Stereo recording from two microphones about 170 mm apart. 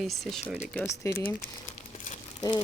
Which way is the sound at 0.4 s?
5° right (ahead or behind).